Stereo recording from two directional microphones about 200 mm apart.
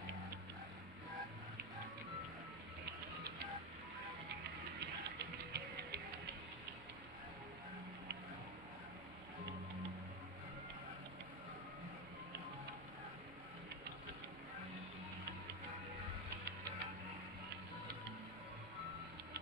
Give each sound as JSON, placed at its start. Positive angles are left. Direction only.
{"t": 4.7, "sound": "music", "side_deg": -55}